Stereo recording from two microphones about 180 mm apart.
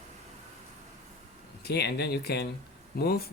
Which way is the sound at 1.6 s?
65° left (ahead or behind).